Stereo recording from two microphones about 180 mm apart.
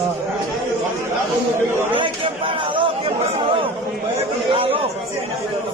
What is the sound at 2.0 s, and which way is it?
Chatter, 30° right (ahead or behind).